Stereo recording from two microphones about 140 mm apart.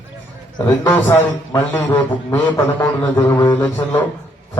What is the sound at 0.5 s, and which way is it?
Speech, 30° left (ahead or behind).